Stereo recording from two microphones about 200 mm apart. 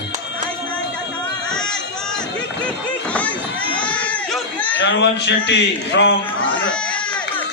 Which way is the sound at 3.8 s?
5° left (ahead or behind).